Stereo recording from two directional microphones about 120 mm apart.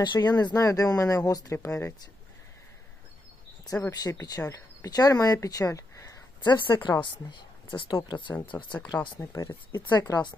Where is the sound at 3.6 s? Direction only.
30° left (ahead or behind).